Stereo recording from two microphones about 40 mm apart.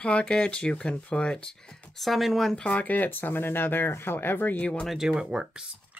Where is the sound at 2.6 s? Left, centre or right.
Left.